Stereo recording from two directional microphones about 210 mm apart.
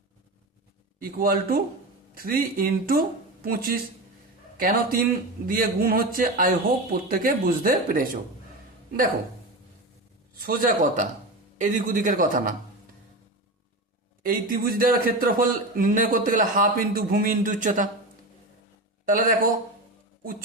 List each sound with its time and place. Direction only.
0.9 s speech: 45° right (ahead or behind)
10.4 s a man's voice: 40° right (ahead or behind)
14.2 s a man's voice: 40° right (ahead or behind)
19.0 s a man's voice: 40° right (ahead or behind)